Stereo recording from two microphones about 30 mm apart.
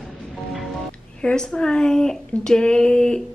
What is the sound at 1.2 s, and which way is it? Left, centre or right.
Speech, left.